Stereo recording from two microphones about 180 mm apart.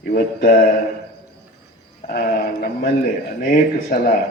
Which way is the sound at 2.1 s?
50° left (ahead or behind).